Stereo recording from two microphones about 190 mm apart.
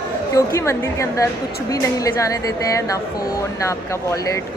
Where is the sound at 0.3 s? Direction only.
15° left (ahead or behind).